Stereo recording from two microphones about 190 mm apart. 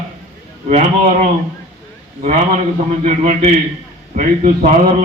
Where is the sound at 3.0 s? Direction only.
40° right (ahead or behind).